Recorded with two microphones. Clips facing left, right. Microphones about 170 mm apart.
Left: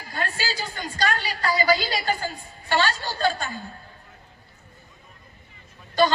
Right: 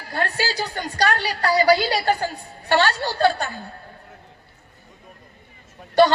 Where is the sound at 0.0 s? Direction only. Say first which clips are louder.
Right 5 dB; 70° right (ahead or behind).